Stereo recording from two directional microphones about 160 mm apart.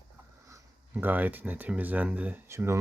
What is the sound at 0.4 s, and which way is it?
Speech, 15° right (ahead or behind).